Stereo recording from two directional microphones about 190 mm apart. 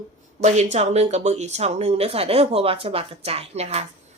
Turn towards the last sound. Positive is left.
turn(degrees=-35)  # may be behind; listen again after turning